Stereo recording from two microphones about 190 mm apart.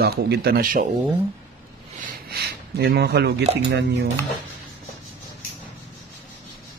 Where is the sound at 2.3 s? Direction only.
60° right (ahead or behind).